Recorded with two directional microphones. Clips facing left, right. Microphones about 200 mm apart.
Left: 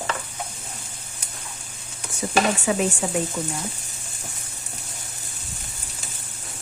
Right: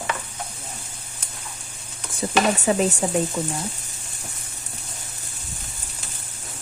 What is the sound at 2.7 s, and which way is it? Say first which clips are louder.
Speech: right 4 dB; 35° right (ahead or behind).